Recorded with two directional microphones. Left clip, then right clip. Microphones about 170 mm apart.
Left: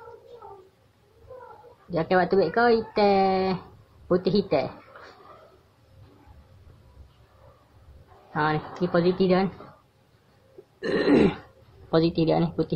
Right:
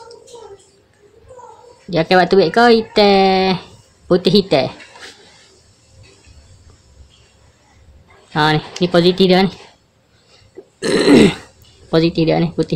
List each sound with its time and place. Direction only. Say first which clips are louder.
1.9 s speech: right 10 dB; 45° right (ahead or behind)
8.3 s speech: right 10 dB; 45° right (ahead or behind)
10.8 s burping: right 10 dB; 45° right (ahead or behind)
11.9 s speech: right 8 dB; 25° right (ahead or behind)